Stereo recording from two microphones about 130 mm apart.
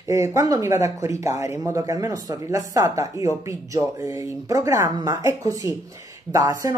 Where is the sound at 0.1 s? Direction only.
25° right (ahead or behind).